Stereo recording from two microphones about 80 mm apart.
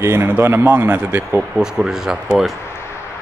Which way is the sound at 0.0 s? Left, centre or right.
Right.